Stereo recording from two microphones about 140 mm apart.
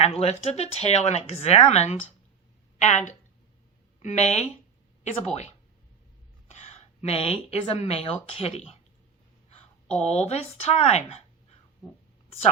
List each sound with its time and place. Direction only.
0.0 s a woman's voice: 45° left (ahead or behind)
7.0 s speech: 45° left (ahead or behind)
9.8 s a sound: 10° left (ahead or behind)
10.1 s speech: 50° left (ahead or behind)